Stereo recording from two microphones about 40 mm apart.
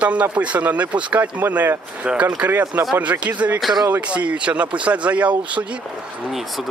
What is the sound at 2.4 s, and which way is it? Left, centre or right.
Speech, right.